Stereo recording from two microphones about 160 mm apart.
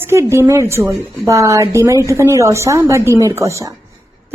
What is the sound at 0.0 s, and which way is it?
A woman's voice, 15° right (ahead or behind).